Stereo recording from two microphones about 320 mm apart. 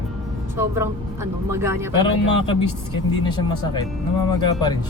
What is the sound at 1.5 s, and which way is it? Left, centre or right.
Speech, centre.